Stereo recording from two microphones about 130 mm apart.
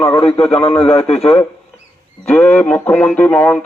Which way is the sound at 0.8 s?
50° left (ahead or behind).